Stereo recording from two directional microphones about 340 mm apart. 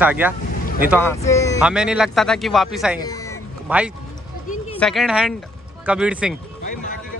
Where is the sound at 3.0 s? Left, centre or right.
Centre.